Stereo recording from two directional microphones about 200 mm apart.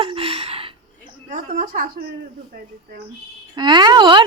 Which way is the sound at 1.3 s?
40° right (ahead or behind).